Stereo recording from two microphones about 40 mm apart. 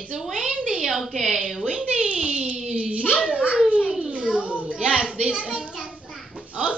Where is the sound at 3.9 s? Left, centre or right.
Right.